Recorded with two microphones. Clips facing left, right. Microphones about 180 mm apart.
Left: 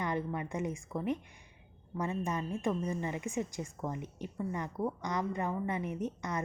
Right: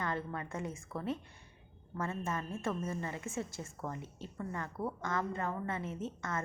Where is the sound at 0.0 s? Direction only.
20° left (ahead or behind).